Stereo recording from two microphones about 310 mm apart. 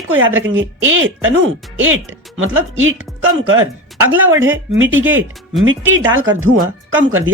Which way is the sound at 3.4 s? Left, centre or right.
Right.